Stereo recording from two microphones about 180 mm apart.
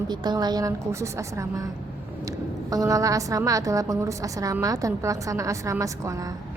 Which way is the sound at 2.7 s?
20° right (ahead or behind).